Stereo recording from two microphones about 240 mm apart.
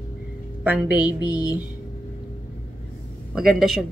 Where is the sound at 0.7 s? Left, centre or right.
Centre.